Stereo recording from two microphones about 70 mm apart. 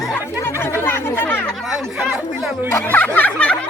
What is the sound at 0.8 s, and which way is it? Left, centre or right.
Chatter, left.